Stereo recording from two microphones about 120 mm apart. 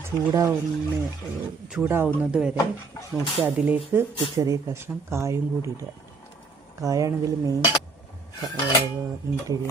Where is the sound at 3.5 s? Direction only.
10° right (ahead or behind).